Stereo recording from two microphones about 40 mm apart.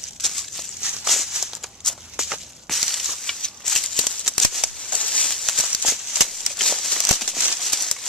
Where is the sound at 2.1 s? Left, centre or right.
Centre.